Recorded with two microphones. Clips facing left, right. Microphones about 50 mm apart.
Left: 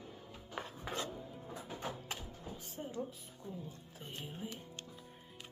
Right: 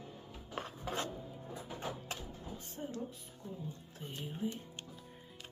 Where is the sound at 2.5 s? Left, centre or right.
Centre.